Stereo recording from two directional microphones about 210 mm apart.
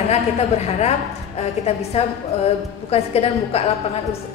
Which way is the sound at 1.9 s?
30° left (ahead or behind).